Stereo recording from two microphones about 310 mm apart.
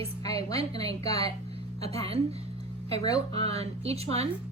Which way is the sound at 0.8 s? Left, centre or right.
Centre.